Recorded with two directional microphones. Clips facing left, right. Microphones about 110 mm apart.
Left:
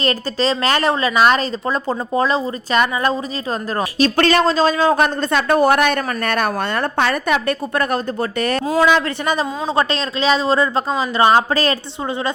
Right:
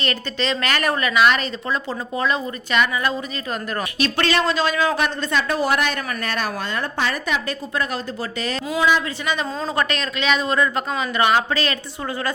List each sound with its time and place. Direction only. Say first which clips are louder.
0.0 s a woman's voice: left 6 dB; 35° left (ahead or behind); by 8.8 s 50° left (ahead or behind)
8.8 s speech: left 4 dB; 80° left
9.2 s speech: left 5 dB; 40° left (ahead or behind)
9.6 s speech: left 4 dB; 30° left (ahead or behind)